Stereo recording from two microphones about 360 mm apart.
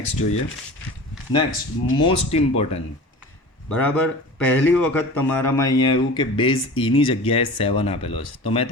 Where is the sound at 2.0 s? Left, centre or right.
Centre.